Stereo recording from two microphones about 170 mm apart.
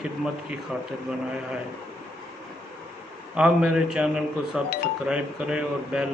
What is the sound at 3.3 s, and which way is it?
Speech, 5° right (ahead or behind).